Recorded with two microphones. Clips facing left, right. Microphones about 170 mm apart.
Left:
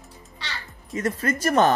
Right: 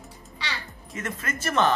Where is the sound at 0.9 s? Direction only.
35° left (ahead or behind).